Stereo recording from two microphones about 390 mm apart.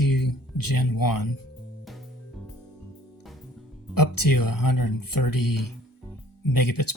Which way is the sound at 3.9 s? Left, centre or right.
Left.